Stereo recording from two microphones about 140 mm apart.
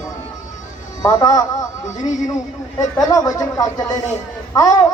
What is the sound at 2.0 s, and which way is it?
Speech, 60° left (ahead or behind).